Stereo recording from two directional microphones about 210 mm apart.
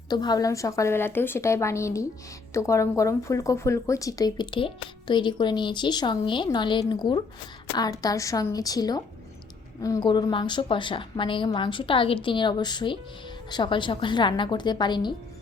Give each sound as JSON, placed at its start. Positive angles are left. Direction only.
{"t": 0.1, "sound": "a woman's voice", "side_deg": 20}